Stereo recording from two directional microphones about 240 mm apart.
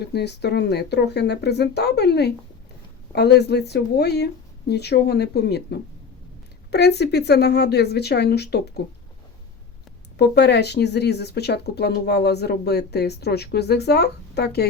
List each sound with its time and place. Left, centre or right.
0.0 s speech: left
10.2 s speech: left